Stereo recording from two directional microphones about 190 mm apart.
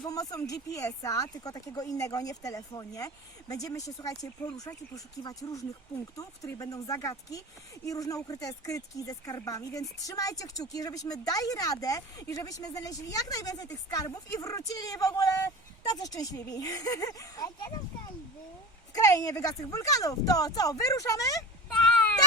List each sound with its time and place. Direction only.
0.0 s speech: 20° left (ahead or behind)
18.9 s speech: 20° left (ahead or behind)
21.7 s baby cry: 5° left (ahead or behind)